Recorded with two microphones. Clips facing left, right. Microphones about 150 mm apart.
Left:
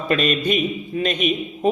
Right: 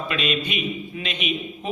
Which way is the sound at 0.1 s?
45° left (ahead or behind).